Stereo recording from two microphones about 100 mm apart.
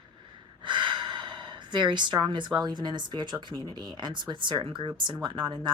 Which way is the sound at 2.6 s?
50° right (ahead or behind).